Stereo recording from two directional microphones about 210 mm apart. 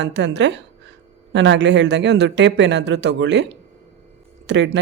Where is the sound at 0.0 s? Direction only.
55° right (ahead or behind).